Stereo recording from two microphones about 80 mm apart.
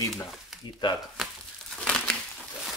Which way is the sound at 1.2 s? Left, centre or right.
Centre.